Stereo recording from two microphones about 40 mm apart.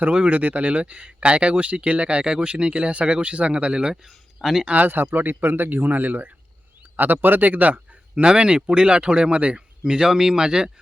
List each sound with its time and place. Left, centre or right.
0.1 s speech: right
4.4 s speech: centre
4.6 s speech: right
4.9 s speech: right
8.2 s speech: right